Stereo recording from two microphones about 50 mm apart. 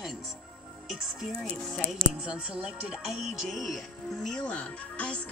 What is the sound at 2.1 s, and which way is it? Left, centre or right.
Speech, centre.